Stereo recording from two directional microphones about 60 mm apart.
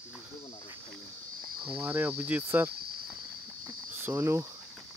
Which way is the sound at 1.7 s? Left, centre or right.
Right.